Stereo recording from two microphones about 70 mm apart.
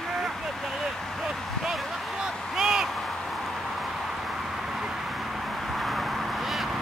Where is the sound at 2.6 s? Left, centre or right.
Centre.